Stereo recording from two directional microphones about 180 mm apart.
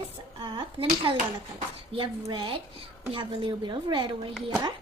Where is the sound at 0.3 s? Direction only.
30° right (ahead or behind).